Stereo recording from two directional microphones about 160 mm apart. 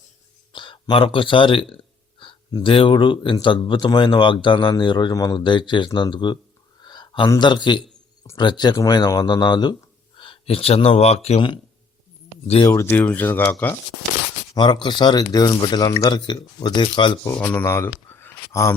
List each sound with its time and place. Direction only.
0.5 s speech: 30° left (ahead or behind)
6.8 s a sound: 25° left (ahead or behind)
7.3 s speech: 30° left (ahead or behind)
12.6 s speech: 15° left (ahead or behind)
14.5 s speech: 25° left (ahead or behind)
17.2 s speech: 15° left (ahead or behind)
18.1 s a sound: 15° left (ahead or behind)